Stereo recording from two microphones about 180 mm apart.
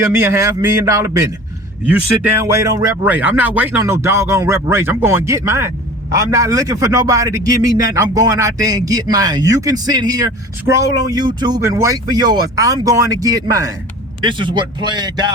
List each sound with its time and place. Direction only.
0.1 s speech: 15° right (ahead or behind)